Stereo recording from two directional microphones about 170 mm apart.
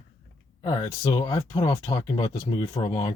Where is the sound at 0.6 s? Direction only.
20° left (ahead or behind).